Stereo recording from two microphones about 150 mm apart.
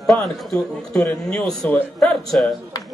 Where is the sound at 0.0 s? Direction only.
Centre (ahead or behind).